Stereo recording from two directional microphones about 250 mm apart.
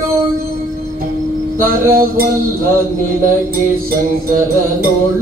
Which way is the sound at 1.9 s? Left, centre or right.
Right.